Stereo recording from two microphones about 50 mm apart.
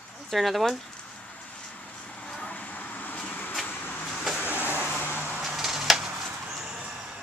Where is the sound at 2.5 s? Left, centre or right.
Left.